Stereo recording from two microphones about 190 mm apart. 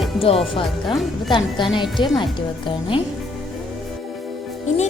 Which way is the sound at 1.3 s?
25° left (ahead or behind).